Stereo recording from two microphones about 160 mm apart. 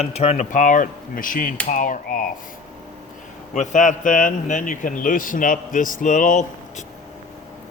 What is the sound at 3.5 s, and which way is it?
A man's voice, 50° left (ahead or behind).